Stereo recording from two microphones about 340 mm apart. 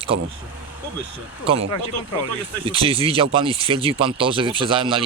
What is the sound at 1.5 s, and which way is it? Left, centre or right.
Speech, centre.